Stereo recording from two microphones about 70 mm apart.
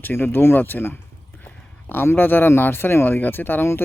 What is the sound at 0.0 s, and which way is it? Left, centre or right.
Speech, left.